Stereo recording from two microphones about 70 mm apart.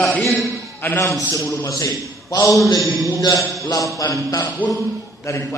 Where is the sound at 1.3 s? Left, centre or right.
Left.